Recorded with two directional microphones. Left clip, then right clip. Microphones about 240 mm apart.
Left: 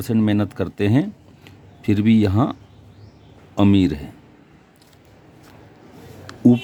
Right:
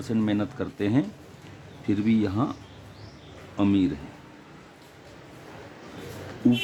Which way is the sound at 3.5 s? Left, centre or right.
Left.